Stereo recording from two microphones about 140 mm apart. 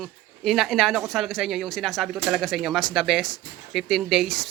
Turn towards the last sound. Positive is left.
turn(degrees=0)  # may be behind; listen again after turning